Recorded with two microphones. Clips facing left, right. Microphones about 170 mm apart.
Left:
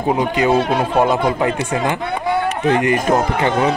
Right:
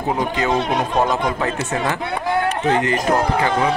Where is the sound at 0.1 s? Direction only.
15° left (ahead or behind).